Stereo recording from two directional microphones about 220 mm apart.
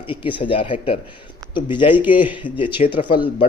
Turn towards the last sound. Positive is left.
turn(degrees=25)  # may be behind; listen again after turning